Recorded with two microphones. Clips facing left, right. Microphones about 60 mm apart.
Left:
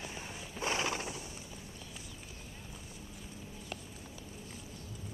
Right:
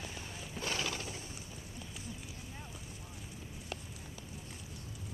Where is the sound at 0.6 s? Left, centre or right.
Left.